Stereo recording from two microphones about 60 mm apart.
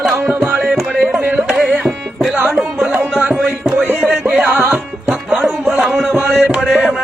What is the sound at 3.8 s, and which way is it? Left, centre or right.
Music, right.